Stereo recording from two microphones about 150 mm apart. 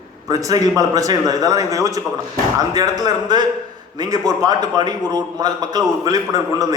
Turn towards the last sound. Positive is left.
turn(degrees=-25)  # may be behind; listen again after turning